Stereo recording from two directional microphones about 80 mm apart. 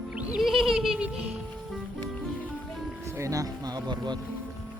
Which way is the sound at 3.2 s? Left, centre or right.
Right.